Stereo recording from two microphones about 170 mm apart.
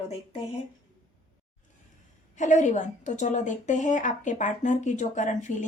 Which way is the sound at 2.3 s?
45° left (ahead or behind).